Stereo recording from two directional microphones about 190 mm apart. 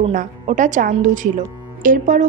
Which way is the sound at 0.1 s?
40° right (ahead or behind).